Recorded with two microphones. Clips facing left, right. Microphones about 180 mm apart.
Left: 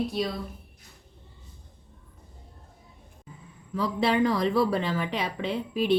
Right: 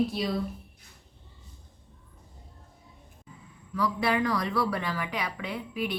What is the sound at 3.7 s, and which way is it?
Speech, 25° left (ahead or behind).